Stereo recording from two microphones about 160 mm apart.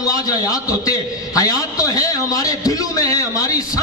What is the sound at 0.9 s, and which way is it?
A man's voice, 20° left (ahead or behind).